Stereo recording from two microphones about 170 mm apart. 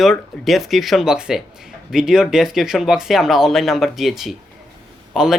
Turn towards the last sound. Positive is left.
turn(degrees=-5)  # may be behind; listen again after turning